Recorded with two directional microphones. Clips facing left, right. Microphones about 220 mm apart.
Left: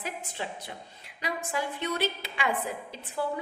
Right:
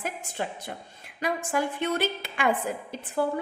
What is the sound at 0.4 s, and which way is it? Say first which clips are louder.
A woman's voice: right 6 dB; 50° right (ahead or behind).